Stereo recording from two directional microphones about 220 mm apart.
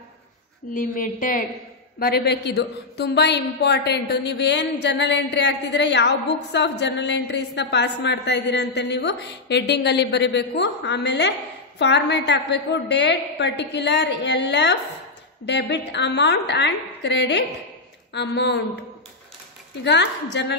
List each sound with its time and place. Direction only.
0.7 s a woman's voice: 40° left (ahead or behind)
19.8 s a woman's voice: 50° left (ahead or behind)